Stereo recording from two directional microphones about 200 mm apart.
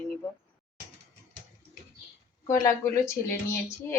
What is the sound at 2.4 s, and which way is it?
Speech, 15° left (ahead or behind).